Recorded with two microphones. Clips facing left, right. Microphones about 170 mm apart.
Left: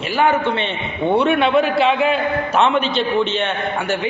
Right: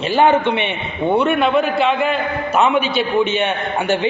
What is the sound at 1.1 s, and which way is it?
A man's voice, centre (ahead or behind).